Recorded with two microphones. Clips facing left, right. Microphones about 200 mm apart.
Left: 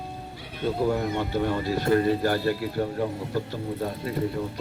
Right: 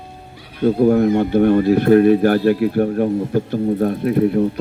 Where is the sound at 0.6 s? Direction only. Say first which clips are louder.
Right 11 dB; 60° right (ahead or behind).